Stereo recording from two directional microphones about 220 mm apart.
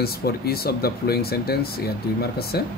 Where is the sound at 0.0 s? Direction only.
45° left (ahead or behind).